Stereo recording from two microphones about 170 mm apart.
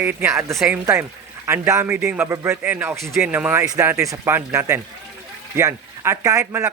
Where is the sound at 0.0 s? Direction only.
10° right (ahead or behind).